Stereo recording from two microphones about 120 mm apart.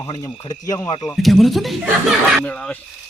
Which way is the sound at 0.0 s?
25° left (ahead or behind).